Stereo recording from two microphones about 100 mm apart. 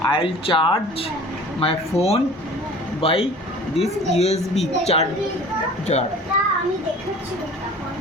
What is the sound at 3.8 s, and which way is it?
Speech, 90° left.